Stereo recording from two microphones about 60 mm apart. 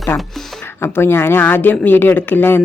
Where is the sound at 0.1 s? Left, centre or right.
Left.